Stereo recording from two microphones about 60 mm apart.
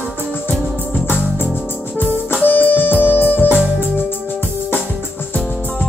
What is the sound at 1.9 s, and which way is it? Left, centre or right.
Music, left.